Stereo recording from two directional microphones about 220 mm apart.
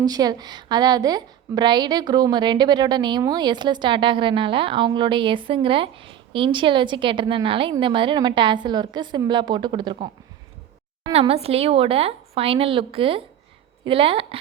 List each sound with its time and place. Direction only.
0.0 s a woman's voice: 15° right (ahead or behind)